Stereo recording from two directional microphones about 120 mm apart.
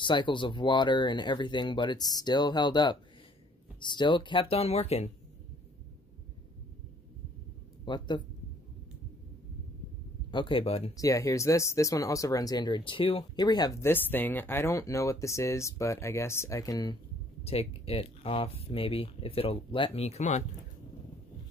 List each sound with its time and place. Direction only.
0.0 s speech: 40° left (ahead or behind); by 5.1 s 60° left (ahead or behind)
7.8 s speech: 40° left (ahead or behind)
10.3 s speech: 45° left (ahead or behind)
11.0 s speech: 30° left (ahead or behind); by 13.2 s 45° left (ahead or behind)
13.2 s speech: 35° left (ahead or behind)
17.4 s speech: 55° left (ahead or behind); by 20.4 s 75° left (ahead or behind)